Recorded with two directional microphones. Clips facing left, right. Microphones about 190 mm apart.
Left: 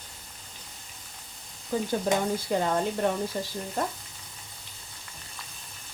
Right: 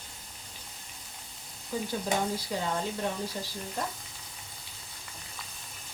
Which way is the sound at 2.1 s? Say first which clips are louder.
Left 4 dB; 55° left (ahead or behind).